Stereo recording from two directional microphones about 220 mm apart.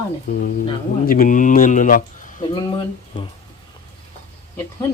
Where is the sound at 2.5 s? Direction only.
20° left (ahead or behind).